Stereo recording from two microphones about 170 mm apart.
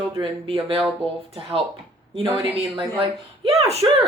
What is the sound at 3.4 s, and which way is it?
Speech, 40° right (ahead or behind).